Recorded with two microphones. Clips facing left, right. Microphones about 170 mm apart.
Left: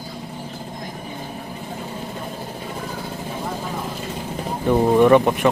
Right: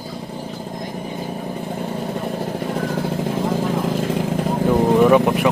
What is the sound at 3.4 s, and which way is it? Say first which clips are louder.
Vehicle: right 7 dB; 90° right.